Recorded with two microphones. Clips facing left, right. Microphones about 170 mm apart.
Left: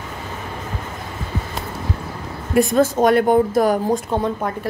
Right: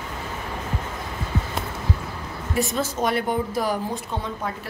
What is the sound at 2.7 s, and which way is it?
Speech, 50° left (ahead or behind).